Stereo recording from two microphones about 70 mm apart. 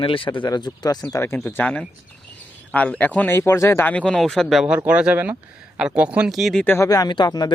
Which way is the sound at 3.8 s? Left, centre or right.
Left.